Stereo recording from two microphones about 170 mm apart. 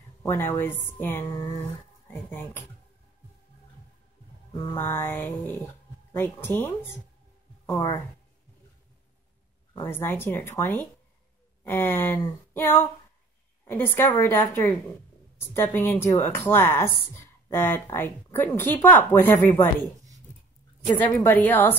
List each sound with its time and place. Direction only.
0.2 s a woman's voice: 15° left (ahead or behind)
4.7 s speech: 15° left (ahead or behind)
9.8 s speech: 15° left (ahead or behind)
15.5 s speech: 15° left (ahead or behind)
20.8 s speech: 10° left (ahead or behind)